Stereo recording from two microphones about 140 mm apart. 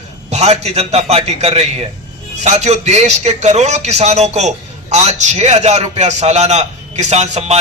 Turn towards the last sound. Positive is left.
turn(degrees=-55)  # may be behind; listen again after turning